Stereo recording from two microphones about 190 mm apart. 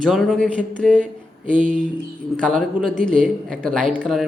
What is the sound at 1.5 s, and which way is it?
Speech, 45° right (ahead or behind).